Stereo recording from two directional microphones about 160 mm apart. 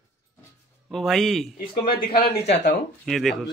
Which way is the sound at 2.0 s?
70° left (ahead or behind).